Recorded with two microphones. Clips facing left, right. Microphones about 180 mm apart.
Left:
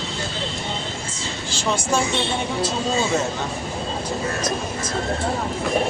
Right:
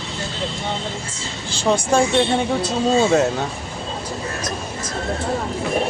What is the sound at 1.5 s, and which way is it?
Speech, 55° right (ahead or behind).